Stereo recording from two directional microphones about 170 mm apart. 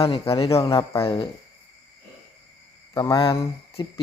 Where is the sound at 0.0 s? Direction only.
35° left (ahead or behind).